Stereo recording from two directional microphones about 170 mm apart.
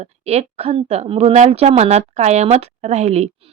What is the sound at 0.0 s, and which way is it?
A woman's voice, 40° right (ahead or behind).